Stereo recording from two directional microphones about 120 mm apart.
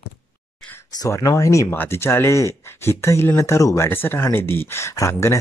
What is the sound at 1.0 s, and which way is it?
Speech, 30° left (ahead or behind).